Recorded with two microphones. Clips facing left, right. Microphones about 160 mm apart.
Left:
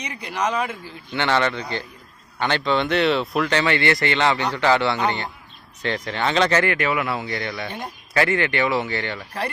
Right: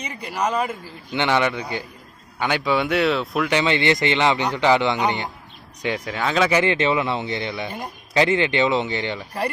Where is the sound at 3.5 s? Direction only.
20° right (ahead or behind).